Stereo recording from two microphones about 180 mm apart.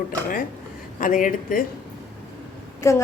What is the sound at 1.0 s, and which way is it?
Speech, 50° left (ahead or behind).